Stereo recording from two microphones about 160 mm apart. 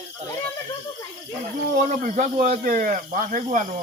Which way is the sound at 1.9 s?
55° right (ahead or behind).